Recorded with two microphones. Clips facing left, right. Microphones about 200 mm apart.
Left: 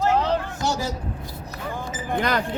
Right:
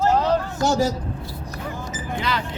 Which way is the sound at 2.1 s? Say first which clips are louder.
Left 3 dB; 50° left (ahead or behind).